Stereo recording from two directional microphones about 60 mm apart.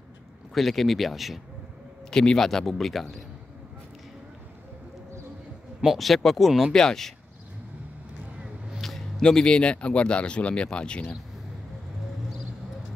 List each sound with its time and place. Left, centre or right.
0.6 s speech: centre
2.0 s speech: centre
5.9 s speech: centre
8.8 s a sound: centre
9.2 s speech: centre